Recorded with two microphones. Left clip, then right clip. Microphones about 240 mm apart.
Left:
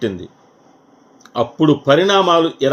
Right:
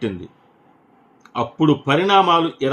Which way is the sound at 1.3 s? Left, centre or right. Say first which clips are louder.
Left 3 dB; centre.